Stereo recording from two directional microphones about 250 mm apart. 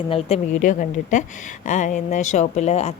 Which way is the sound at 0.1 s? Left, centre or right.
Left.